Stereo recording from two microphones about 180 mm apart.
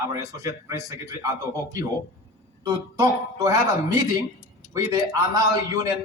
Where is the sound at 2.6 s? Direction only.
20° right (ahead or behind).